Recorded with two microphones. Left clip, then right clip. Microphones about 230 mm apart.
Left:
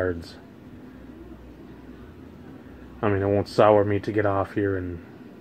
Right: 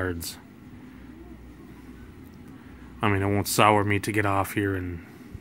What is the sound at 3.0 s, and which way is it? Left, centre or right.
Speech, right.